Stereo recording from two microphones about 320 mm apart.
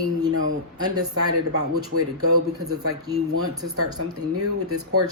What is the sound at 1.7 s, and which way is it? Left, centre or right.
Speech, right.